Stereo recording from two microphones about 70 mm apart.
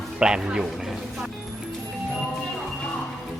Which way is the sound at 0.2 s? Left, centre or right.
Centre.